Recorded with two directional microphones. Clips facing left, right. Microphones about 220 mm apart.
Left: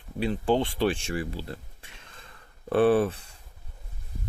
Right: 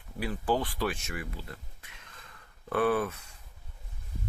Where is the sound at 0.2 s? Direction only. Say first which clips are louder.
Left 5 dB; 25° left (ahead or behind).